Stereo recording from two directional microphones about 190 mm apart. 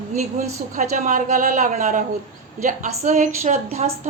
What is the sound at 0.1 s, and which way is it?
A woman's voice, 35° right (ahead or behind).